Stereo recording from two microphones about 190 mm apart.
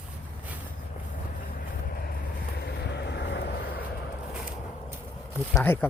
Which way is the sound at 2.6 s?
60° left (ahead or behind).